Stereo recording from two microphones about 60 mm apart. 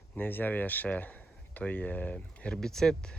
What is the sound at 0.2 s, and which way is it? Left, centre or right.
Speech, left.